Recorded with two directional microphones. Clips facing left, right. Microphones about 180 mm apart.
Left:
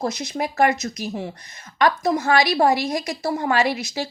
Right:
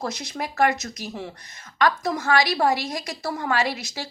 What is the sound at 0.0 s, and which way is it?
A woman's voice, 20° left (ahead or behind).